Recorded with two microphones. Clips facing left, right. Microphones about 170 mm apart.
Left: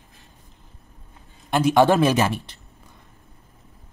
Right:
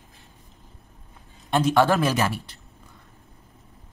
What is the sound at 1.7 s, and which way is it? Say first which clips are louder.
Speech: left 5 dB; 20° left (ahead or behind).